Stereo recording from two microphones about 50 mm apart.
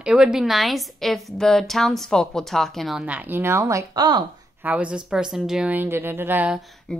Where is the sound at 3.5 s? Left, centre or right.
Right.